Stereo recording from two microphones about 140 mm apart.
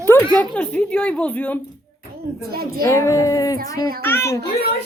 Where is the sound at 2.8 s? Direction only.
25° left (ahead or behind).